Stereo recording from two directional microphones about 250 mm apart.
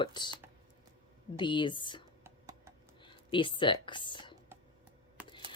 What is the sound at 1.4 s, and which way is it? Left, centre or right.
Speech, centre.